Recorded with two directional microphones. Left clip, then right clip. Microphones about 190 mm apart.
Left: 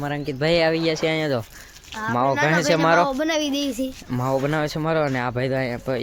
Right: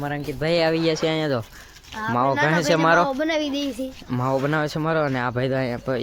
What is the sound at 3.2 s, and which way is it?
Speech, 40° left (ahead or behind).